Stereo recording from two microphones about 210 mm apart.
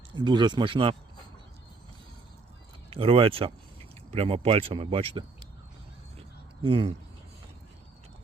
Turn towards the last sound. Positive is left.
turn(degrees=-25)  # may be behind; listen again after turning